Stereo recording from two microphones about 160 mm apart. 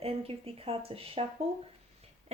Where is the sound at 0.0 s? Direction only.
35° right (ahead or behind).